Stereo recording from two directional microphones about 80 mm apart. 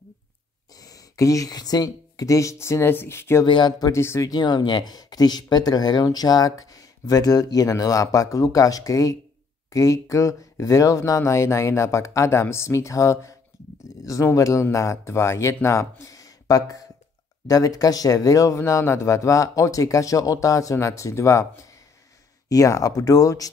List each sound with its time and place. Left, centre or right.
0.7 s speech: left
3.4 s speech: left
3.9 s speech: left
4.3 s speech: left
22.5 s speech: left